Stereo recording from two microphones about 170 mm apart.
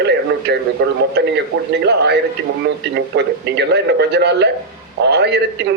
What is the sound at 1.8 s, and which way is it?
A man's voice, 90° right.